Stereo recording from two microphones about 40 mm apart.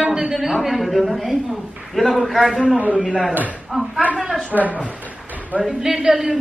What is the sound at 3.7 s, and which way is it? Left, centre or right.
Speech, centre.